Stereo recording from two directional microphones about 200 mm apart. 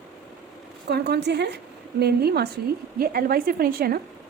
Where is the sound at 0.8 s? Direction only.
55° right (ahead or behind).